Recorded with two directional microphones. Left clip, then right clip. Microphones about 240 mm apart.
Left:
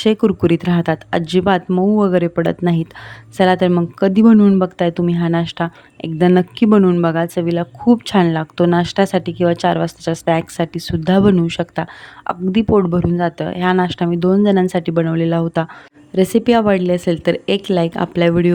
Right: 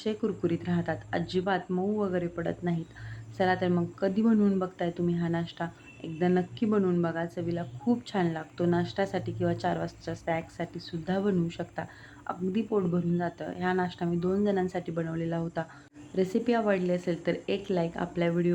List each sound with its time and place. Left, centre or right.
0.0 s speech: left